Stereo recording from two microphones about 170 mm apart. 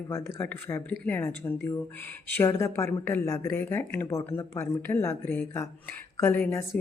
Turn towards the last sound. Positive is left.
turn(degrees=10)  # may be behind; listen again after turning